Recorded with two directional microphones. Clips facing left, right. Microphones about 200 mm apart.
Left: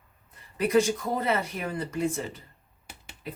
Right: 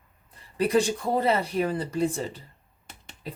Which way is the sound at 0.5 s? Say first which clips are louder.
Even; 30° right (ahead or behind).